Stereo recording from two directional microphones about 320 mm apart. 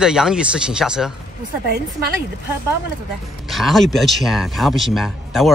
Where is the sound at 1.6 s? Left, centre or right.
Right.